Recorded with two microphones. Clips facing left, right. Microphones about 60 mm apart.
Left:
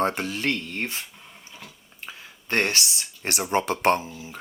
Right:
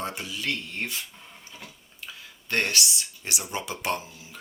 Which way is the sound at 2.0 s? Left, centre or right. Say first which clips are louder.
Left 2 dB; left.